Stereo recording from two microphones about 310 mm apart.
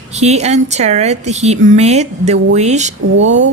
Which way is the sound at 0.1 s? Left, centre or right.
Right.